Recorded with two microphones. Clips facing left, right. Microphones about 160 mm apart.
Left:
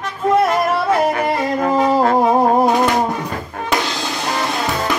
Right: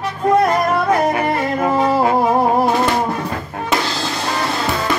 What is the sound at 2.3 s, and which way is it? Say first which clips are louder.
Music: left 1 dB; 15° left (ahead or behind).